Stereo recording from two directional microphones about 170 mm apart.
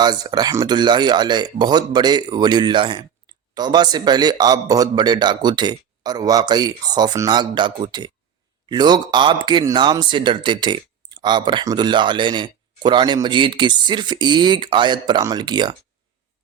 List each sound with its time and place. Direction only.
0.0 s speech: 25° right (ahead or behind)